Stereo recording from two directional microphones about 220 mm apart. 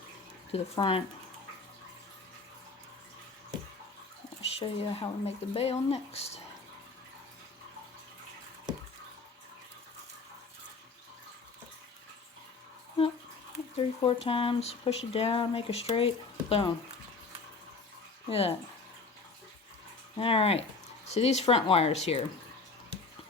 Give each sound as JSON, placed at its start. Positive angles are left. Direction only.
{"t": 0.5, "sound": "speech", "side_deg": 25}
{"t": 4.6, "sound": "speech", "side_deg": 25}
{"t": 13.7, "sound": "a sound", "side_deg": 25}
{"t": 14.3, "sound": "speech", "side_deg": 25}
{"t": 18.3, "sound": "speech", "side_deg": 25}
{"t": 20.1, "sound": "speech", "side_deg": 25}